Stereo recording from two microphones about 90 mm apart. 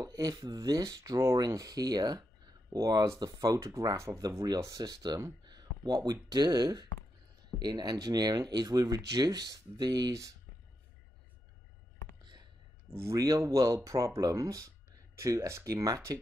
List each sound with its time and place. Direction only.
0.0 s speech: 40° right (ahead or behind)
12.9 s speech: 35° right (ahead or behind)